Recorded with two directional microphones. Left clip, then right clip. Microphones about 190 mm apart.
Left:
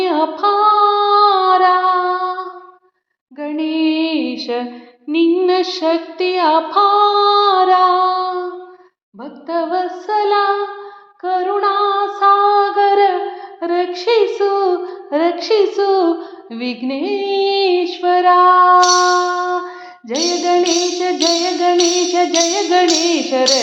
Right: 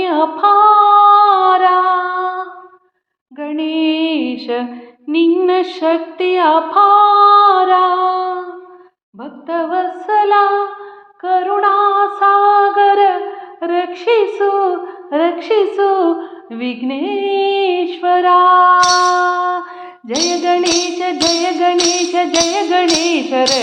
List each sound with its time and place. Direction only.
0.0 s female singing: 25° right (ahead or behind)
3.3 s music: 30° right (ahead or behind)
13.6 s child singing: 30° right (ahead or behind)
14.6 s a woman's voice: 20° right (ahead or behind)
16.0 s music: 20° right (ahead or behind)